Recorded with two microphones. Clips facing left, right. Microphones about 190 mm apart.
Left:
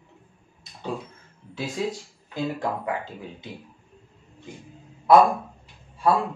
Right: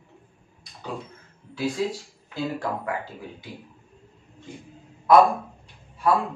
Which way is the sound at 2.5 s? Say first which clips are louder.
Left 1 dB; 20° left (ahead or behind).